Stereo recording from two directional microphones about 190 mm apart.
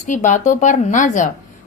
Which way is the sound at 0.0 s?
40° left (ahead or behind).